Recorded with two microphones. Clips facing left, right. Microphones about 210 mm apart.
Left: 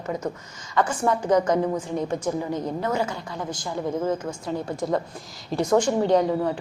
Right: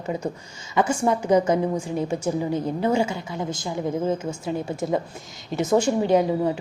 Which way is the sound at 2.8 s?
30° right (ahead or behind).